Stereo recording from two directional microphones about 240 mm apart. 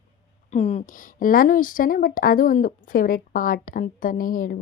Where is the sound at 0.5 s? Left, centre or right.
Left.